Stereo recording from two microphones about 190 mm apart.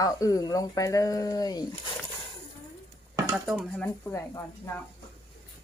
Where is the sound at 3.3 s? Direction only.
5° right (ahead or behind).